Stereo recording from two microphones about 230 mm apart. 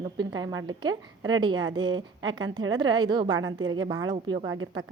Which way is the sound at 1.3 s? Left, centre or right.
Centre.